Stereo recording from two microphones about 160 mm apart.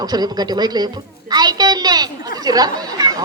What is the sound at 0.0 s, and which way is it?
A man's voice, 25° right (ahead or behind).